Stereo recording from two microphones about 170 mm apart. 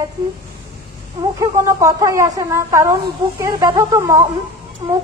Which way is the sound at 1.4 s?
20° right (ahead or behind).